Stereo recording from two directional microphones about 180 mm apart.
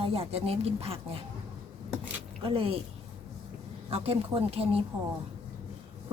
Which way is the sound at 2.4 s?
30° right (ahead or behind).